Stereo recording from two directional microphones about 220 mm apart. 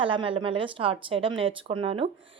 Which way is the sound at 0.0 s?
25° right (ahead or behind).